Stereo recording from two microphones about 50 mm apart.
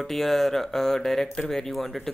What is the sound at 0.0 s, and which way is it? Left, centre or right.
Speech, centre.